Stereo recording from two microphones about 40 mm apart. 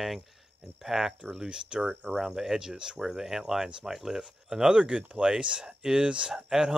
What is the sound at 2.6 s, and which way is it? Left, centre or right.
Speech, centre.